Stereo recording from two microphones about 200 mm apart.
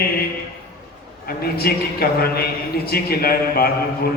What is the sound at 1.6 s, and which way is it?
Mantra, 50° left (ahead or behind).